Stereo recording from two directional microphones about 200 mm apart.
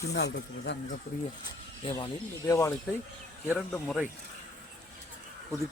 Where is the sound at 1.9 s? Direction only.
20° left (ahead or behind).